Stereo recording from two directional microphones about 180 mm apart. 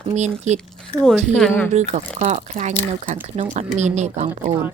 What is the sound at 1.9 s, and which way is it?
A woman's voice, 40° right (ahead or behind).